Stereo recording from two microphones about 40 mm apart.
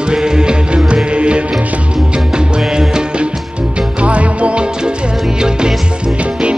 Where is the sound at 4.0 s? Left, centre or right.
Right.